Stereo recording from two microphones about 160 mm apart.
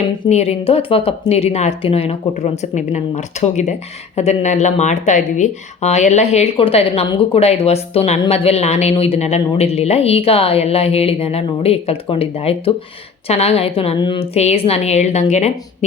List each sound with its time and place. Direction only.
0.3 s a woman's voice: 40° left (ahead or behind)